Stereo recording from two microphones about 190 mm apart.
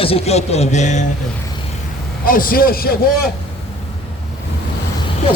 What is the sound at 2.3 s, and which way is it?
Speech, 50° left (ahead or behind).